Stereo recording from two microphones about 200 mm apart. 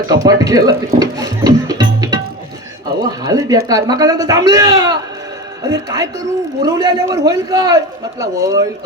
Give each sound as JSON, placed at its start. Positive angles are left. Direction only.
{"t": 0.1, "sound": "music", "side_deg": -20}
{"t": 3.1, "sound": "a man's voice", "side_deg": -20}